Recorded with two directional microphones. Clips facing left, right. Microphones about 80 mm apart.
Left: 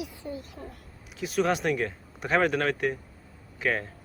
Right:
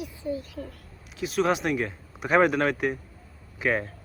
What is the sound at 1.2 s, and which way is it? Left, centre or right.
A man's voice, centre.